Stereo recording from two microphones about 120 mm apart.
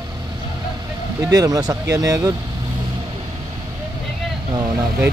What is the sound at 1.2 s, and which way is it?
Speech, 30° right (ahead or behind).